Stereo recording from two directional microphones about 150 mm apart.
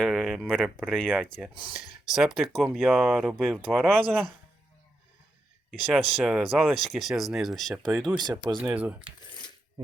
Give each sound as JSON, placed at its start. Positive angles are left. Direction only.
{"t": 0.0, "sound": "speech", "side_deg": 0}
{"t": 5.8, "sound": "speech", "side_deg": -5}
{"t": 8.1, "sound": "speech", "side_deg": -30}
{"t": 8.5, "sound": "speech", "side_deg": -5}